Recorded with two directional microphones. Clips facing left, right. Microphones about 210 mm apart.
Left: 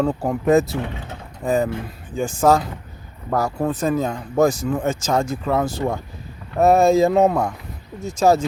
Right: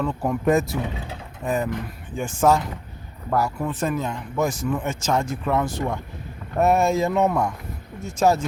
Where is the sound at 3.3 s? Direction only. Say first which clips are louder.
Left 3 dB; 40° left (ahead or behind).